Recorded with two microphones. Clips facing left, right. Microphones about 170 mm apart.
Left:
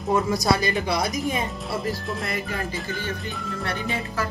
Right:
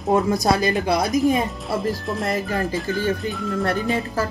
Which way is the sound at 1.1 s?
Centre (ahead or behind).